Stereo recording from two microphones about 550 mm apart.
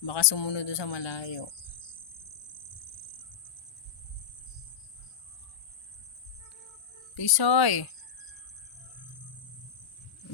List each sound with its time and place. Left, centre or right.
0.0 s speech: left
7.2 s speech: left